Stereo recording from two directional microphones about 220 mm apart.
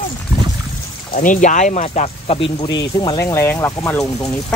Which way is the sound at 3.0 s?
15° left (ahead or behind).